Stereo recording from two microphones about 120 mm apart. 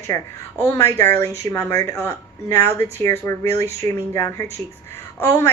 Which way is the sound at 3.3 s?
25° left (ahead or behind).